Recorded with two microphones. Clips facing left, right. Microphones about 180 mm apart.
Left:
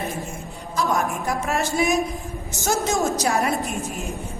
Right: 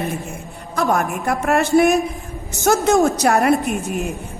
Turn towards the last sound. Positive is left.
turn(degrees=-65)  # may be behind; listen again after turning